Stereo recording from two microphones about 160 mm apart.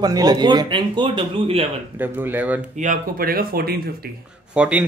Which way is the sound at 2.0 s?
10° right (ahead or behind).